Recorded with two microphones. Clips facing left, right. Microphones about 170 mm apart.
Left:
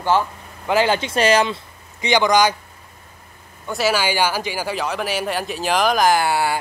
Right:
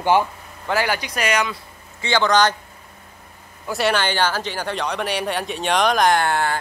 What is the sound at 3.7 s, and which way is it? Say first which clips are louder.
Speech: left 1 dB; centre (ahead or behind).